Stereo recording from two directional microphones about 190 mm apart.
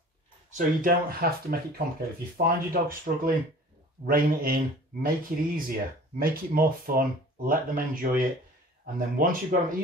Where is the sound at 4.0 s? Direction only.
50° right (ahead or behind).